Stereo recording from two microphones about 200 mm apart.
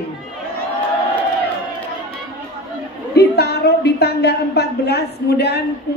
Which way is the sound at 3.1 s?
55° left (ahead or behind).